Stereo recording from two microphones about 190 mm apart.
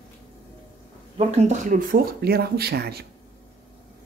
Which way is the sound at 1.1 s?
35° right (ahead or behind).